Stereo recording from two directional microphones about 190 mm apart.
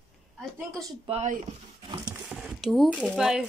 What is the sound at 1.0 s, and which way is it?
Speech, 35° right (ahead or behind).